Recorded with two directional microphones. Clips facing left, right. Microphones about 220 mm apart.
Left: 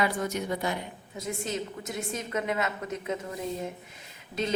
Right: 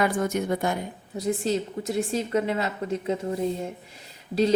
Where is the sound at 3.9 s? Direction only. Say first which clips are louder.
Right 9 dB; 35° right (ahead or behind).